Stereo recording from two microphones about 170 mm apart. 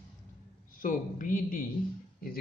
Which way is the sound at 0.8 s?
55° left (ahead or behind).